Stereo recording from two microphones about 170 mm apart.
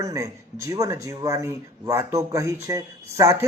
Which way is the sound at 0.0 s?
20° right (ahead or behind).